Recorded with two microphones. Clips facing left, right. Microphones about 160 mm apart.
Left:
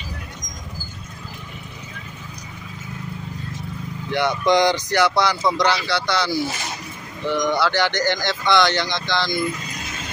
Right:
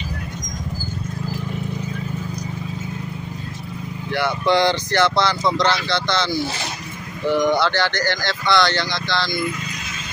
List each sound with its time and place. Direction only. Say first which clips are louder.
4.1 s speech: left 1 dB; 20° left (ahead or behind)
7.2 s speech: right 3 dB; 5° right (ahead or behind)
7.7 s speech: left 1 dB; 15° left (ahead or behind)